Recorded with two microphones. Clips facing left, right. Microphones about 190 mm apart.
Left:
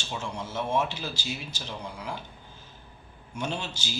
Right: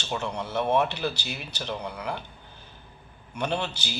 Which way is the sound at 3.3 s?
65° right (ahead or behind).